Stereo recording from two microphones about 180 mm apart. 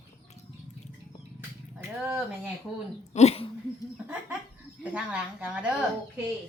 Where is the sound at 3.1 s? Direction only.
35° left (ahead or behind).